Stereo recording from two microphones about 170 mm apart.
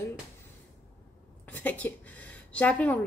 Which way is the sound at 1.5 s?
10° left (ahead or behind).